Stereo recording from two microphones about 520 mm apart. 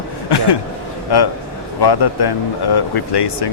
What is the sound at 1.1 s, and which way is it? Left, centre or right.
Speech, left.